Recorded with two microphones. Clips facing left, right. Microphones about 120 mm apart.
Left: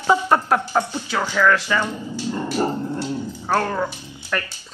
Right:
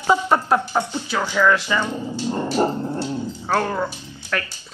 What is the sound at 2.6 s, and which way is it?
Dog, 30° right (ahead or behind).